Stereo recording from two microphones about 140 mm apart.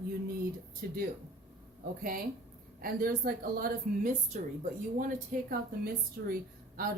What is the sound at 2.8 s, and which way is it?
A woman's voice, 90° right.